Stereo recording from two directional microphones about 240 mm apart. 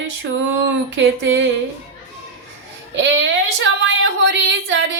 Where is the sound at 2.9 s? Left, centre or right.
Right.